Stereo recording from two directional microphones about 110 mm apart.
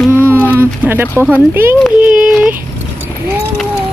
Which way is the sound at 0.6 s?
20° right (ahead or behind).